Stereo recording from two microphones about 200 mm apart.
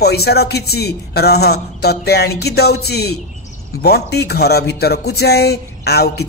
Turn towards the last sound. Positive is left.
turn(degrees=55)  # may be behind; listen again after turning